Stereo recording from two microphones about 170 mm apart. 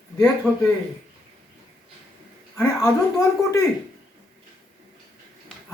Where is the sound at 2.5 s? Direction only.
20° left (ahead or behind).